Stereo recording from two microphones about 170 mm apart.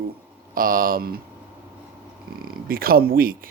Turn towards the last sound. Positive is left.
turn(degrees=-60)  # may be behind; listen again after turning